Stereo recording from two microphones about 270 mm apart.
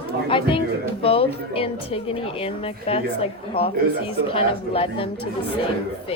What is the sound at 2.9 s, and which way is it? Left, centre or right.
Speech, left.